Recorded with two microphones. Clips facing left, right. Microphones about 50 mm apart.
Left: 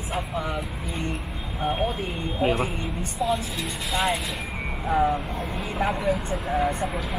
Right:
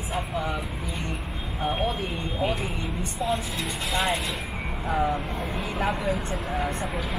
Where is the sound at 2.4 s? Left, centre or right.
Left.